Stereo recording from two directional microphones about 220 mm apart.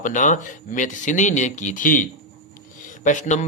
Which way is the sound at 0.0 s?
35° left (ahead or behind).